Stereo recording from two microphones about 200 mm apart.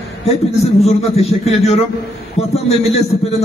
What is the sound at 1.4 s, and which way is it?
A man's voice, 30° left (ahead or behind).